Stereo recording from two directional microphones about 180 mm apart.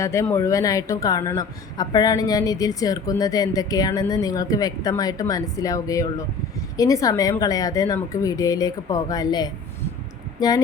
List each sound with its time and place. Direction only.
0.0 s speech: 15° left (ahead or behind)